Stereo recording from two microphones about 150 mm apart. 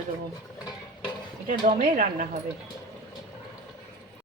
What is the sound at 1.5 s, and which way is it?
Speech, 60° right (ahead or behind).